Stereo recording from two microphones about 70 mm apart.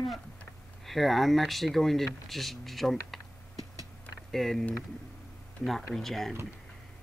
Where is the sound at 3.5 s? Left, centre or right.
Right.